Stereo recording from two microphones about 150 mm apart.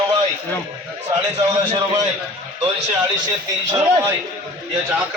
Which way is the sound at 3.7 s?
25° right (ahead or behind).